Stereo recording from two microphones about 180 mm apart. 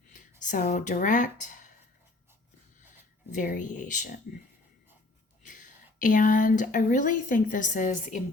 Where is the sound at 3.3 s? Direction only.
45° left (ahead or behind).